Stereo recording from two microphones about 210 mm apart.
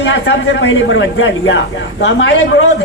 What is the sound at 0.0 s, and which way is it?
A man's voice, 60° left (ahead or behind).